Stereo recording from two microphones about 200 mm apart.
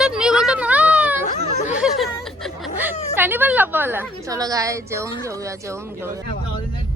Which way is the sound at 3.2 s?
10° right (ahead or behind).